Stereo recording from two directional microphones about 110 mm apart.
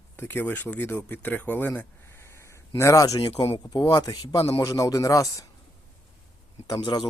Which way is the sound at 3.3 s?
65° left (ahead or behind).